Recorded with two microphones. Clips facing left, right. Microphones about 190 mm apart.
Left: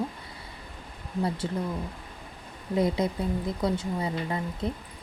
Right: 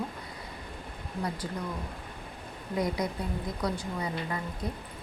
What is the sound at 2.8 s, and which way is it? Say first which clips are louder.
Speech: left 5 dB; 25° left (ahead or behind).